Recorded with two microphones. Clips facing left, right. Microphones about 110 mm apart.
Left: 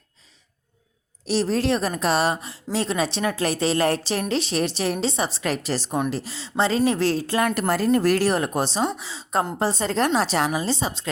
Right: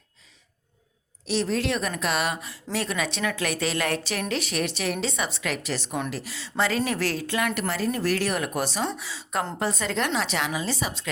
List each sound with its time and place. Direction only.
1.2 s a woman's voice: 35° left (ahead or behind)
7.9 s speech: 50° left (ahead or behind)
8.3 s a woman's voice: 30° left (ahead or behind)